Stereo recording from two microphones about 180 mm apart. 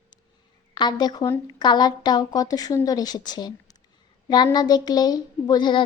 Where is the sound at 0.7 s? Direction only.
25° left (ahead or behind).